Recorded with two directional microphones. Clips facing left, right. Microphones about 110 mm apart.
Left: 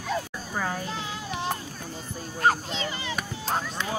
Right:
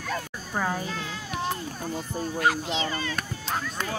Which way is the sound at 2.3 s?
40° left (ahead or behind).